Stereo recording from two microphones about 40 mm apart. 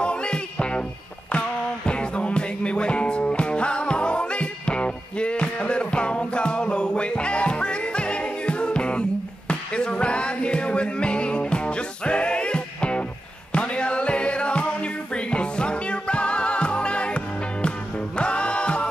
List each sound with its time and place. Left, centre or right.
0.0 s music: left
1.9 s music: left